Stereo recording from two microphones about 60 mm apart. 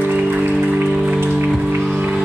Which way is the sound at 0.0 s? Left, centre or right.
Right.